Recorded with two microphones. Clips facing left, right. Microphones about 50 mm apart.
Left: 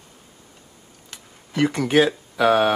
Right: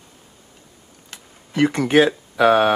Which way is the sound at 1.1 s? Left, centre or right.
Centre.